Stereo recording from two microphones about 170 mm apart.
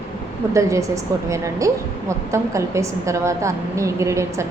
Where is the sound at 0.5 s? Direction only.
20° right (ahead or behind).